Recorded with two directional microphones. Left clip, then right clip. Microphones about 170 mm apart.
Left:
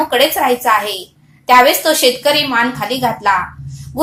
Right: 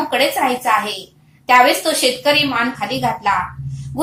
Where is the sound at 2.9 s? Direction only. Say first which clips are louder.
Left 3 dB; 30° left (ahead or behind).